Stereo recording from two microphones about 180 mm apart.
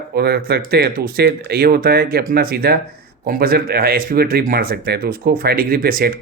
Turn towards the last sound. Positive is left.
turn(degrees=-55)  # may be behind; listen again after turning